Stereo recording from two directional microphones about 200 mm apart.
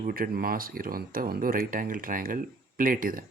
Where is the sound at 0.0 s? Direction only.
45° right (ahead or behind).